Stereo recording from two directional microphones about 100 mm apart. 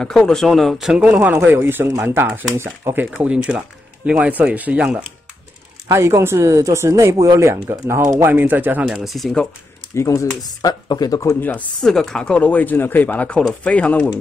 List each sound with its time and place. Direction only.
0.3 s speech: centre (ahead or behind)
1.0 s speech: 15° right (ahead or behind)
3.2 s speech: 10° right (ahead or behind)
5.9 s speech: 30° right (ahead or behind)
8.3 s speech: 20° right (ahead or behind); by 9.5 s 5° left (ahead or behind)
9.9 s speech: 35° left (ahead or behind)
11.4 s speech: 15° left (ahead or behind)